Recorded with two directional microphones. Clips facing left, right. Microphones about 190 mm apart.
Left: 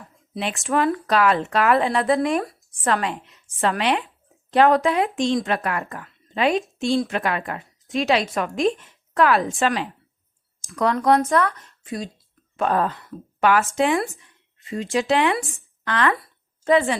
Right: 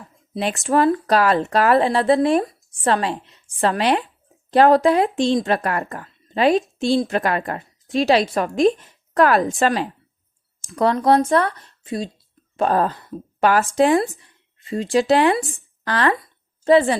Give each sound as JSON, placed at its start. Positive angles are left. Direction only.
{"t": 0.3, "sound": "speech", "side_deg": -40}
{"t": 12.5, "sound": "speech", "side_deg": -35}